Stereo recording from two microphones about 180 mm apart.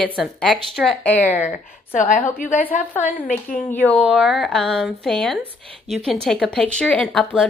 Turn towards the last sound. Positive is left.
turn(degrees=5)  # may be behind; listen again after turning